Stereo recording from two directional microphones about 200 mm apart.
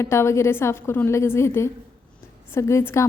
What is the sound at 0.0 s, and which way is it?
A woman's voice, 15° left (ahead or behind).